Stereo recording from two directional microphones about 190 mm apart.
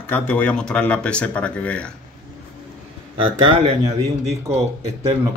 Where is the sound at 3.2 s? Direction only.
35° right (ahead or behind).